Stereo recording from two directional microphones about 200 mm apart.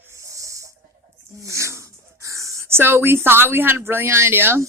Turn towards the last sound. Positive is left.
turn(degrees=-10)  # may be behind; listen again after turning